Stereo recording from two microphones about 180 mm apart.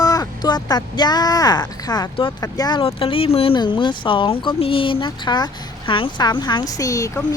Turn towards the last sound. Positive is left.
turn(degrees=15)  # may be behind; listen again after turning